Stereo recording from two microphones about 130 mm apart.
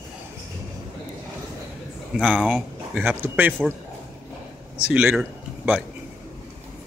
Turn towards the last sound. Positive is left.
turn(degrees=-10)  # may be behind; listen again after turning